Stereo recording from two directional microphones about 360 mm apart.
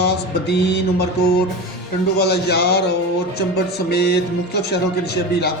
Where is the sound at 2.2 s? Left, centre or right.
Left.